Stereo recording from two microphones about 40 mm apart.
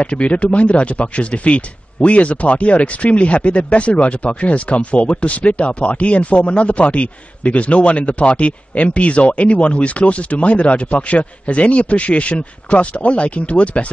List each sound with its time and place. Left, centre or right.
0.0 s speech: left